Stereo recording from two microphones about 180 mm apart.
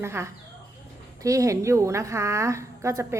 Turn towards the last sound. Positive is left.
turn(degrees=-15)  # may be behind; listen again after turning